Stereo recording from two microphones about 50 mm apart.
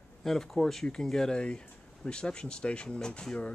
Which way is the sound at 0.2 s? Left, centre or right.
Centre.